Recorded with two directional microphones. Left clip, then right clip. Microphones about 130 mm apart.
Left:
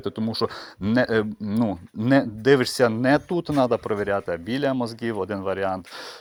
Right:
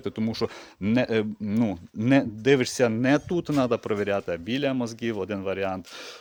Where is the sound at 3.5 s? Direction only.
15° right (ahead or behind).